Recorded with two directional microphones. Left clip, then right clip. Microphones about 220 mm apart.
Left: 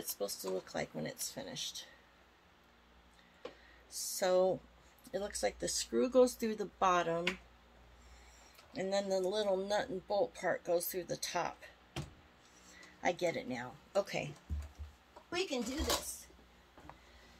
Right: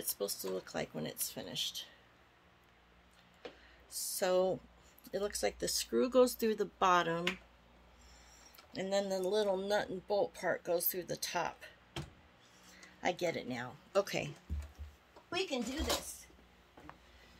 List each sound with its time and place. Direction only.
0.2 s speech: 30° right (ahead or behind)
4.2 s speech: 30° right (ahead or behind)
8.7 s speech: 35° right (ahead or behind)
13.0 s speech: 30° right (ahead or behind)
15.2 s speech: 15° right (ahead or behind)